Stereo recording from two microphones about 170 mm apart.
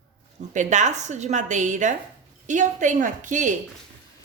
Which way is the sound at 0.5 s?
45° right (ahead or behind).